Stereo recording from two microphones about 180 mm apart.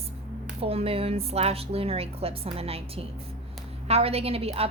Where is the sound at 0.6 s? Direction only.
30° right (ahead or behind).